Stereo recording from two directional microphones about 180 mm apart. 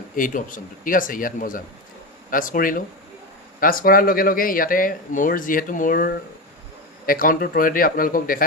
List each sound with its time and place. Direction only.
0.2 s speech: 50° left (ahead or behind)